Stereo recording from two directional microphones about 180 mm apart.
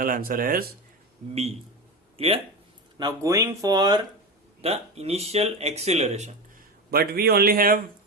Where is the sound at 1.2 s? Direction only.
40° right (ahead or behind).